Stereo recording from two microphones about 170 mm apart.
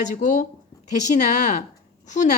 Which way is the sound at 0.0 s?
45° left (ahead or behind).